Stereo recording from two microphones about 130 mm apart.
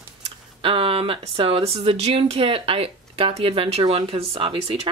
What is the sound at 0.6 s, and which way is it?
Speech, 45° right (ahead or behind).